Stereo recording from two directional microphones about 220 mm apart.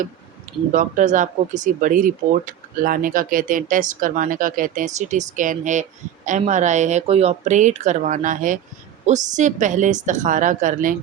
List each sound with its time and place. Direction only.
0.7 s speech: 35° right (ahead or behind)